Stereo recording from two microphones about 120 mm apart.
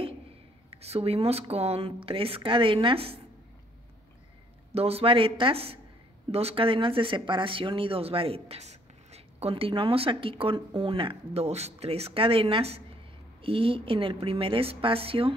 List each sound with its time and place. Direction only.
0.7 s speech: 60° right (ahead or behind)
4.7 s speech: 55° right (ahead or behind)